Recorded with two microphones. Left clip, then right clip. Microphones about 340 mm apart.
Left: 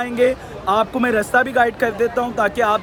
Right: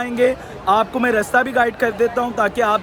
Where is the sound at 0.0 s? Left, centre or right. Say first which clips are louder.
Even; centre.